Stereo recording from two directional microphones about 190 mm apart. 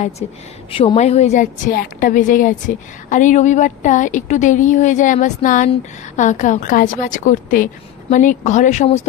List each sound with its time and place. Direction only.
0.2 s a woman's voice: 30° left (ahead or behind)